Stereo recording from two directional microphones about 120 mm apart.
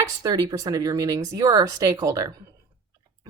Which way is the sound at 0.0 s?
30° right (ahead or behind).